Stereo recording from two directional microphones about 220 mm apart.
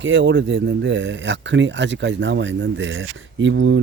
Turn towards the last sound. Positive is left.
turn(degrees=-55)  # may be behind; listen again after turning